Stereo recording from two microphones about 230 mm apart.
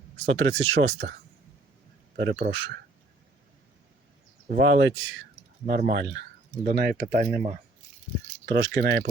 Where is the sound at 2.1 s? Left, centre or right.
Right.